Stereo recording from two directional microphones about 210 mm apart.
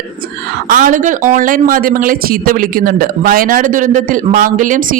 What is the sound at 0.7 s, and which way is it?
Speech, 40° right (ahead or behind).